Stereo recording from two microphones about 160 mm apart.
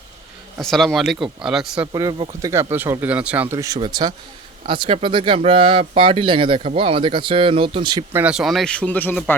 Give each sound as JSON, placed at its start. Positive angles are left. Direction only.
{"t": 0.6, "sound": "speech", "side_deg": 0}
{"t": 1.9, "sound": "speech", "side_deg": -25}
{"t": 3.5, "sound": "speech", "side_deg": -20}
{"t": 8.1, "sound": "speech", "side_deg": -5}